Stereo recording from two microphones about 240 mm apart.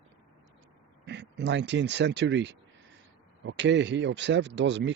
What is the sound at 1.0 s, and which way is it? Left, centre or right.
Speech, right.